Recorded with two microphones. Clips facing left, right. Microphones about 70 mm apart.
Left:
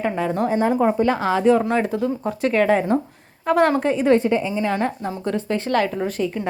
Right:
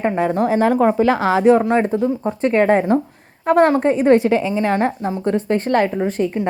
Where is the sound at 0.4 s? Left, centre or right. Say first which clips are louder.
Right 3 dB; right.